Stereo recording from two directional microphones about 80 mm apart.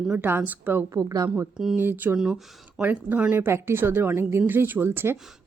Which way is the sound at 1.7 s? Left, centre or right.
Right.